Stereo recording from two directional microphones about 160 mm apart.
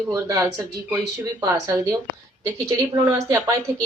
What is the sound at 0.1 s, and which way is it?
A woman's voice, 20° right (ahead or behind).